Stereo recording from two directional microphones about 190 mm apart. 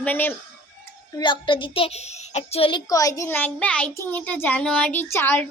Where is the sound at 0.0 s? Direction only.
10° left (ahead or behind).